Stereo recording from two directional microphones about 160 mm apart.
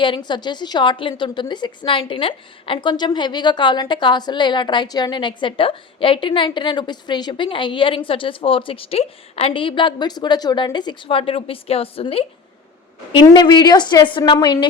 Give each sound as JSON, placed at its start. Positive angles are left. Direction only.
{"t": 0.0, "sound": "a woman's voice", "side_deg": 30}
{"t": 13.1, "sound": "a woman's voice", "side_deg": 25}